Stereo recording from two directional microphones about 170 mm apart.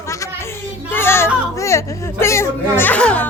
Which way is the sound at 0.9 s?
15° left (ahead or behind).